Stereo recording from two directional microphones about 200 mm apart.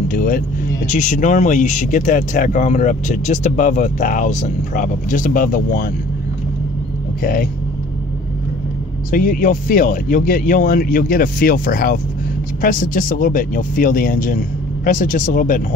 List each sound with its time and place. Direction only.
0.1 s speech: 45° left (ahead or behind)
9.1 s speech: 40° left (ahead or behind)